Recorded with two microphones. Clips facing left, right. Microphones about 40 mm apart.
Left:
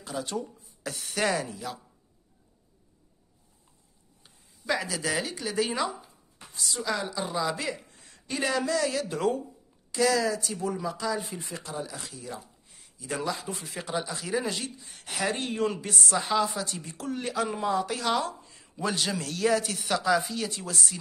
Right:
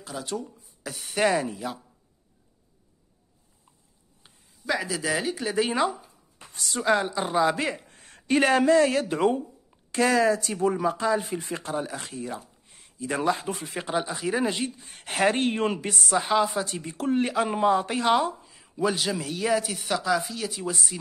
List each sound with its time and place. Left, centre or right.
0.0 s a sound: centre
1.0 s speech: centre
4.6 s speech: centre
5.3 s speech: right
6.5 s a woman's voice: right
14.8 s a woman's voice: right
15.9 s speech: right
18.4 s a man's voice: centre